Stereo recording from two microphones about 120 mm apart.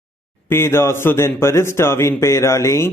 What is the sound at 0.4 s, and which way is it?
Speech, 20° left (ahead or behind).